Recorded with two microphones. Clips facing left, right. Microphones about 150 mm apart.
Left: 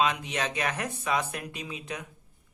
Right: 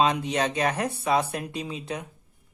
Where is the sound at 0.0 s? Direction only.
35° right (ahead or behind).